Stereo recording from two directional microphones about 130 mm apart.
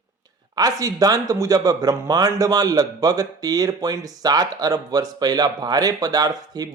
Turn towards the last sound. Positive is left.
turn(degrees=-30)  # may be behind; listen again after turning